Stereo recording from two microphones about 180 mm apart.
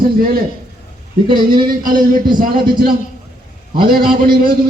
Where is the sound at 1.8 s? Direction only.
50° right (ahead or behind).